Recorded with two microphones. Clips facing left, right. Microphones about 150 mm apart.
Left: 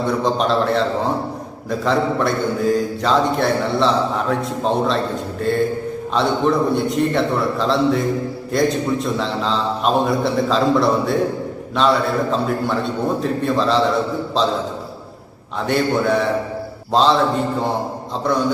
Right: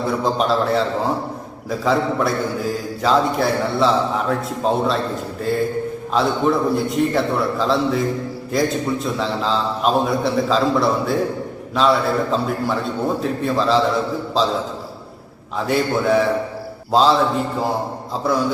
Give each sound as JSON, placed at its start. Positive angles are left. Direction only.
{"t": 0.0, "sound": "a man's voice", "side_deg": -5}
{"t": 1.8, "sound": "a man's voice", "side_deg": -5}
{"t": 15.6, "sound": "a man's voice", "side_deg": 0}